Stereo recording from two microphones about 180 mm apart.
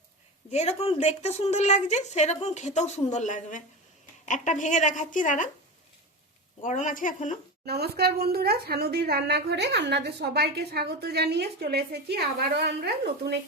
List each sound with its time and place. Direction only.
0.5 s a woman's voice: 35° left (ahead or behind)
6.6 s a woman's voice: 45° left (ahead or behind)
7.6 s a woman's voice: 60° right (ahead or behind)